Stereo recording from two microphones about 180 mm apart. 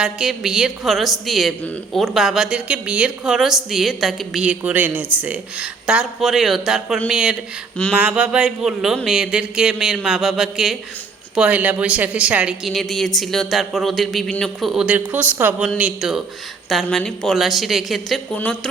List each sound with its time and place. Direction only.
0.0 s speech: 5° right (ahead or behind)